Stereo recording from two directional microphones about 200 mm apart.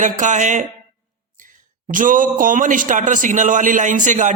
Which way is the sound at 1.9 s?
40° right (ahead or behind).